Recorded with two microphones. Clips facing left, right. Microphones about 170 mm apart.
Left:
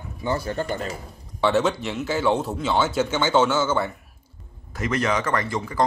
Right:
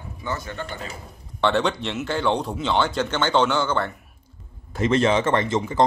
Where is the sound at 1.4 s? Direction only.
5° left (ahead or behind).